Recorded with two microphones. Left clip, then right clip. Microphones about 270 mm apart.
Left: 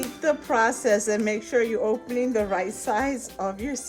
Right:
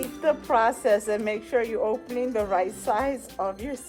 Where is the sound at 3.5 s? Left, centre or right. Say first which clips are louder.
Left 2 dB; centre.